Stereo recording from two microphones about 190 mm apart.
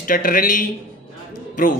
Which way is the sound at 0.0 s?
50° left (ahead or behind).